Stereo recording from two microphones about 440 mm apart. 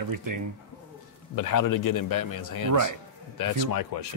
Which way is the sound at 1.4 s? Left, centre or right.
Left.